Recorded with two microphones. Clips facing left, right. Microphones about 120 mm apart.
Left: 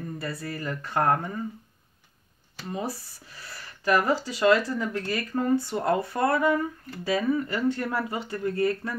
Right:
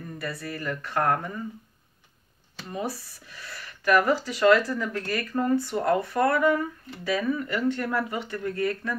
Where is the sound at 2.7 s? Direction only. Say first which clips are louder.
Right 1 dB; 30° left (ahead or behind).